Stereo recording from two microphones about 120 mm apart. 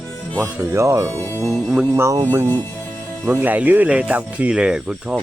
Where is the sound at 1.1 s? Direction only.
20° left (ahead or behind).